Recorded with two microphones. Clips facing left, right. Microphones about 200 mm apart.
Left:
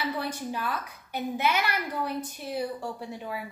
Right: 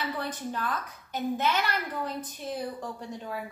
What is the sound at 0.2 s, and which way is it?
A woman's voice, 10° left (ahead or behind).